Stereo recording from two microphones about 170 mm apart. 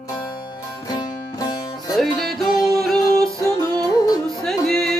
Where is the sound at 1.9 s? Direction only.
Centre (ahead or behind).